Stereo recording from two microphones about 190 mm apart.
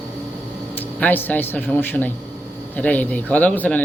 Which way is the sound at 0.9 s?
10° left (ahead or behind).